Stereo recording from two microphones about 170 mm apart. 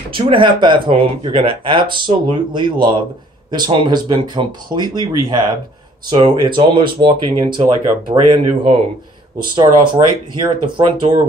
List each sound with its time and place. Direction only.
0.1 s speech: 30° right (ahead or behind)
10.4 s speech: 30° right (ahead or behind)